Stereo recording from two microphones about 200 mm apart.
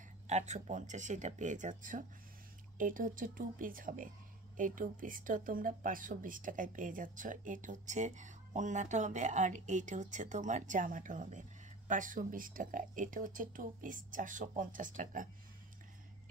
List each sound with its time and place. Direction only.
0.3 s speech: 35° right (ahead or behind)